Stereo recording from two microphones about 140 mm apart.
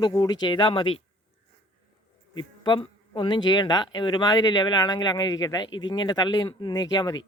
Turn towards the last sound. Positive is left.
turn(degrees=30)  # may be behind; listen again after turning